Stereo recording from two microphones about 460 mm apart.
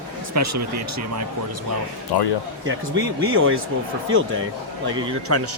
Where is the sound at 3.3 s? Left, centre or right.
Right.